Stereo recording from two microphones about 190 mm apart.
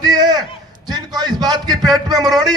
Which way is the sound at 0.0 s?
20° right (ahead or behind).